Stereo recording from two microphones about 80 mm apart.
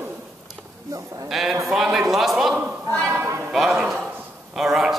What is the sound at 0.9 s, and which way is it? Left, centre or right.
Speech, right.